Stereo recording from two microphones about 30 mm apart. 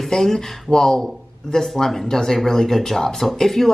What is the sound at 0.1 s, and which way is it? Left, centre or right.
Speech, centre.